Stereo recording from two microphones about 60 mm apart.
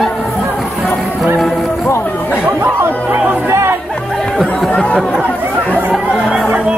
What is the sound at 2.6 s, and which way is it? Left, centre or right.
Chatter, right.